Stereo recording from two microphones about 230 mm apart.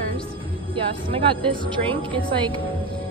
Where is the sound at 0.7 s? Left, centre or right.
Right.